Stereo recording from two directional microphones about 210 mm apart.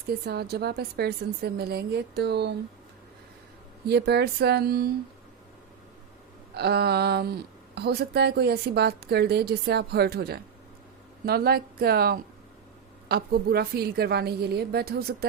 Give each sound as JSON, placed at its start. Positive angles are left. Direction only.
{"t": 0.1, "sound": "a woman's voice", "side_deg": -50}
{"t": 3.8, "sound": "a woman's voice", "side_deg": -50}
{"t": 6.5, "sound": "a woman's voice", "side_deg": -50}